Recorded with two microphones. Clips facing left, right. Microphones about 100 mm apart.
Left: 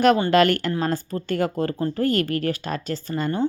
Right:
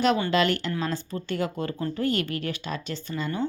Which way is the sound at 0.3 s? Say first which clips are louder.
Left 6 dB; 50° left (ahead or behind).